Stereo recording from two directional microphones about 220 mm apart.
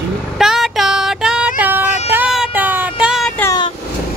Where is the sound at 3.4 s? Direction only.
15° left (ahead or behind).